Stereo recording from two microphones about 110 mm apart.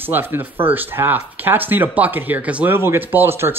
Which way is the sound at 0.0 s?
20° right (ahead or behind).